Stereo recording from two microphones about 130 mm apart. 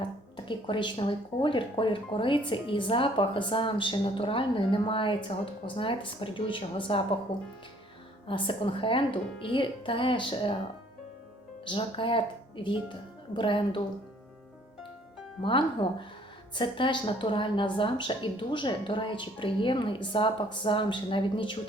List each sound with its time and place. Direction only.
0.3 s a woman's voice: 40° left (ahead or behind)
8.3 s a woman's voice: 40° left (ahead or behind)
11.6 s a woman's voice: 40° left (ahead or behind)
15.4 s a woman's voice: 40° left (ahead or behind)